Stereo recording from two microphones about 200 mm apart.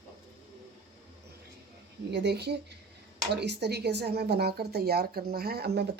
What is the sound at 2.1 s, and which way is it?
Speech, 55° right (ahead or behind).